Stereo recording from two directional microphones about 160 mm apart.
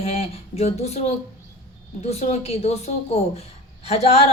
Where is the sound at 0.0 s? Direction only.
40° left (ahead or behind).